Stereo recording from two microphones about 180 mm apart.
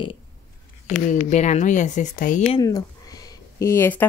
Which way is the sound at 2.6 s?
20° left (ahead or behind).